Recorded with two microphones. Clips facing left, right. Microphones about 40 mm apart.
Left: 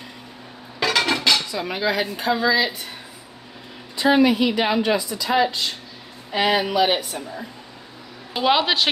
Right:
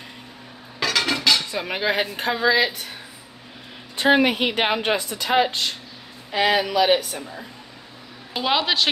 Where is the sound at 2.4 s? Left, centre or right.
Right.